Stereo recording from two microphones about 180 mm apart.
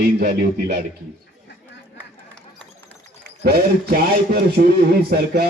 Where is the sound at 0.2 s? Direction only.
60° right (ahead or behind).